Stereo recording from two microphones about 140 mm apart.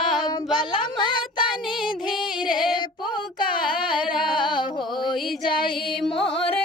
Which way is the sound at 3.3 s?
35° left (ahead or behind).